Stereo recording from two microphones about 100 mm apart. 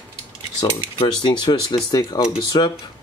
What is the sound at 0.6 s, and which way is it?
Cutlery, 50° left (ahead or behind).